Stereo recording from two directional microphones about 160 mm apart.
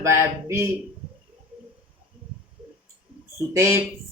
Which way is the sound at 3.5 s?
15° right (ahead or behind).